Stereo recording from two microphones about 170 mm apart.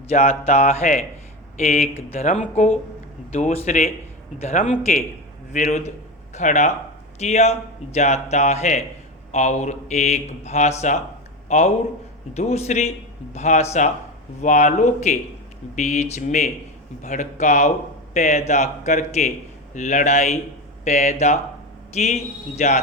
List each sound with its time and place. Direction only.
0.1 s a man's voice: 40° left (ahead or behind)
1.5 s speech: 55° left (ahead or behind)
1.9 s a man's voice: 40° left (ahead or behind)